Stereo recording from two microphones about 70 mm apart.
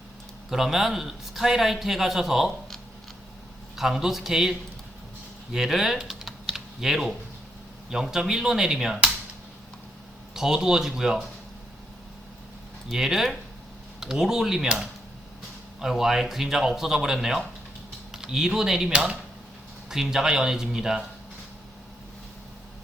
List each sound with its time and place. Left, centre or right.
0.5 s a man's voice: centre
3.8 s speech: centre
5.5 s typing: centre
7.9 s speech: centre
10.3 s speech: centre
12.9 s speech: centre